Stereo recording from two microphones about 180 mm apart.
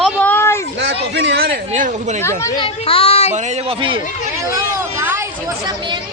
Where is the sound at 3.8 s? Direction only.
30° right (ahead or behind).